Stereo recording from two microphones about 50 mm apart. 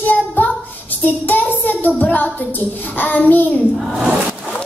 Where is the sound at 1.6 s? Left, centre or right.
Left.